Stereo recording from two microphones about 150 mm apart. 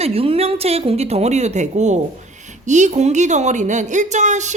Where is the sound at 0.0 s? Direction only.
40° right (ahead or behind).